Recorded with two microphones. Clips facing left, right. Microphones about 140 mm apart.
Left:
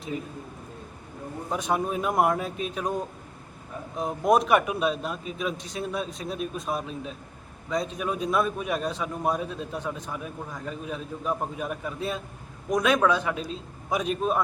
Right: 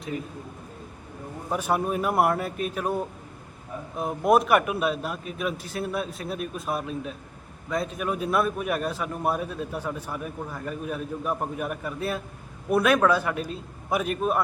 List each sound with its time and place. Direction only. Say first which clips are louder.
1.5 s a man's voice: right 2 dB; 10° right (ahead or behind)